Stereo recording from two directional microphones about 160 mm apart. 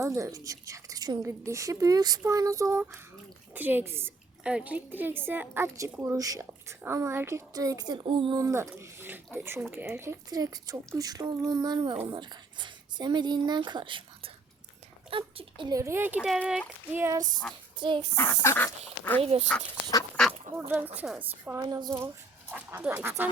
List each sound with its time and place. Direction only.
0.0 s a woman's voice: 20° right (ahead or behind)
8.4 s a woman's voice: 20° right (ahead or behind)
15.7 s a woman's voice: 15° right (ahead or behind)
16.3 s speech: centre (ahead or behind)
16.9 s a woman's voice: 15° right (ahead or behind)
17.7 s a woman's voice: 30° right (ahead or behind)
18.1 s speech: 15° left (ahead or behind)
19.2 s speech: 35° right (ahead or behind)
20.7 s a woman's voice: 10° right (ahead or behind)
21.6 s a woman's voice: 25° right (ahead or behind)
22.5 s a woman's voice: 10° right (ahead or behind)